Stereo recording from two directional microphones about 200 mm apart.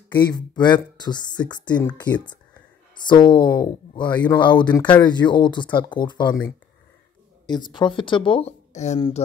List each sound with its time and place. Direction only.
0.2 s speech: 20° left (ahead or behind)
2.1 s speech: 5° left (ahead or behind)
3.1 s speech: 20° left (ahead or behind)